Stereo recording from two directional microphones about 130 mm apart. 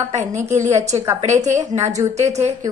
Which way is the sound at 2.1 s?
60° right (ahead or behind).